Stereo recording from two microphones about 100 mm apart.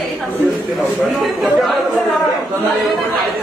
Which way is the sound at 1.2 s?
Centre (ahead or behind).